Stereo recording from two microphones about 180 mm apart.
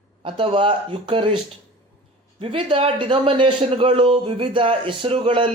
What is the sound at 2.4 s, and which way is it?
A man's voice, 30° right (ahead or behind).